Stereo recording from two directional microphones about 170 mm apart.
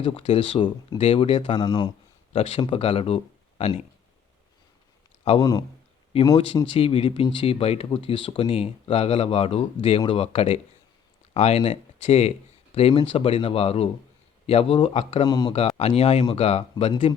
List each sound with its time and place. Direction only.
0.0 s speech: 35° left (ahead or behind)
5.4 s speech: 20° left (ahead or behind)
6.7 s speech: 35° left (ahead or behind)
15.3 s speech: 25° left (ahead or behind)
16.0 s speech: 35° left (ahead or behind)